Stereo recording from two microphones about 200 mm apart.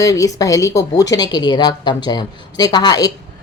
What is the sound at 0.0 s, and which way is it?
Speech, 15° left (ahead or behind).